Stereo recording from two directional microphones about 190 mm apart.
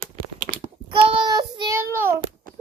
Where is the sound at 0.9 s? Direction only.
25° right (ahead or behind).